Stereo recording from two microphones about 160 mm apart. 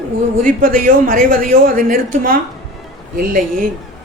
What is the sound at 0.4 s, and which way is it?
Speech, 55° right (ahead or behind).